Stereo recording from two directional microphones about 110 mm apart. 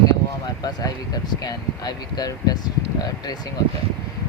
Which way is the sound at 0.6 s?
35° left (ahead or behind).